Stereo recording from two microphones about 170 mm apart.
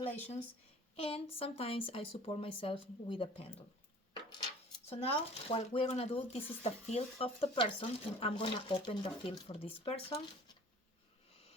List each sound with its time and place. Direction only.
0.9 s speech: 35° left (ahead or behind)
4.9 s speech: 35° left (ahead or behind)